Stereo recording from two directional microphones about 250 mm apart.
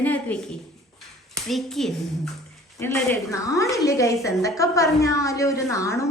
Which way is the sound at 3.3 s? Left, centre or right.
Centre.